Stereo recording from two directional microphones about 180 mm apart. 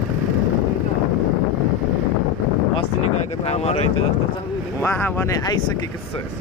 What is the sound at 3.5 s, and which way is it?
Speech, 35° left (ahead or behind).